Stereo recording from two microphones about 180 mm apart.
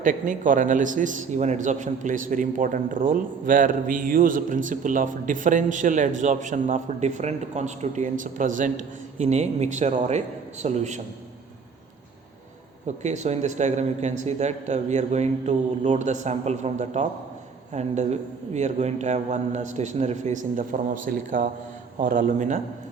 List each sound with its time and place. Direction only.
0.0 s a man's voice: 50° right (ahead or behind)
13.0 s a man's voice: 40° right (ahead or behind)